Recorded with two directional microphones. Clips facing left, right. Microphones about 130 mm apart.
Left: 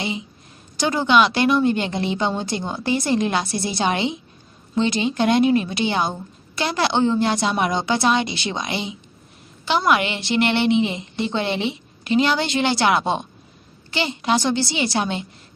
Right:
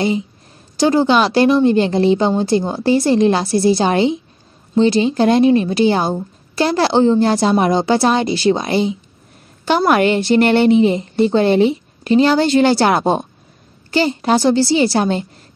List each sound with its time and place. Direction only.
0.7 s a woman's voice: 35° right (ahead or behind)